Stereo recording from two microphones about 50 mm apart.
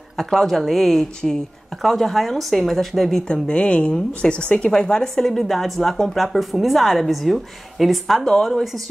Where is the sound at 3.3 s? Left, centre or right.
Centre.